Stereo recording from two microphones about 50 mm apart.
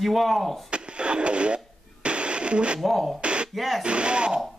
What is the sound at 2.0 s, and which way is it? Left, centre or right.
Music, right.